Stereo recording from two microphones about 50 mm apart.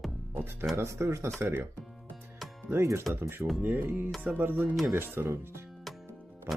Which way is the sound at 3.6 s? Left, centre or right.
Right.